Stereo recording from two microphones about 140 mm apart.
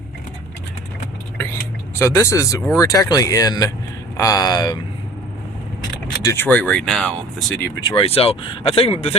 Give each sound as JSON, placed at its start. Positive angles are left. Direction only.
{"t": 2.0, "sound": "speech", "side_deg": 20}
{"t": 6.2, "sound": "speech", "side_deg": 15}
{"t": 7.9, "sound": "speech", "side_deg": 40}